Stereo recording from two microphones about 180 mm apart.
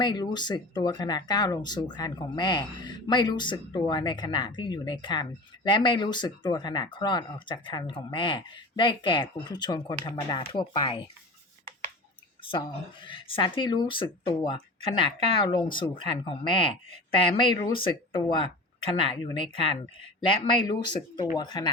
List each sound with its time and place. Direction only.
0.0 s speech: 25° left (ahead or behind)
13.1 s speech: 30° left (ahead or behind)